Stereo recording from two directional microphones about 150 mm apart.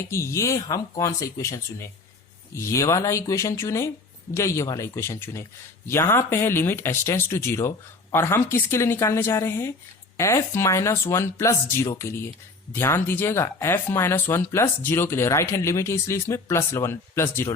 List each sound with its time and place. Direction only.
0.1 s speech: 20° left (ahead or behind)